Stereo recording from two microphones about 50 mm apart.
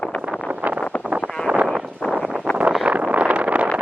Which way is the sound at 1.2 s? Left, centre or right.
Centre.